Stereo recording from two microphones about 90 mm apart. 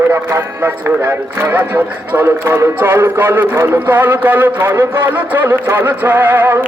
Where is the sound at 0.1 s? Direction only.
30° right (ahead or behind).